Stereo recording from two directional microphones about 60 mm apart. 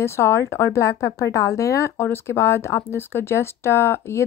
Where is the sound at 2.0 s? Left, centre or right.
Left.